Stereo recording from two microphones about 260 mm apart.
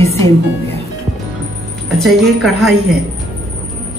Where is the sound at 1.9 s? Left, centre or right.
Centre.